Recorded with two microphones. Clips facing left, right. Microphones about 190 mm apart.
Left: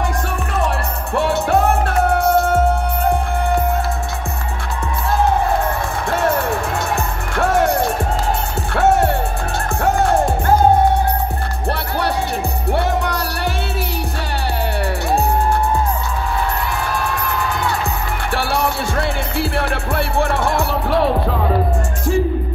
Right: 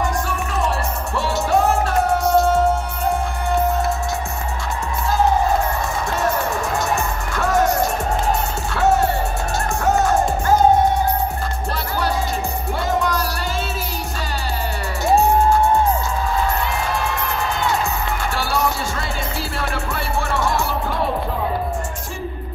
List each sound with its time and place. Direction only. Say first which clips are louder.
1.1 s music: left 3 dB; 60° left (ahead or behind)
8.7 s music: left 3 dB; 60° left (ahead or behind)
12.7 s music: left 1 dB; 65° left (ahead or behind)
18.3 s music: left 4 dB; 65° left (ahead or behind); by 21.4 s 80° left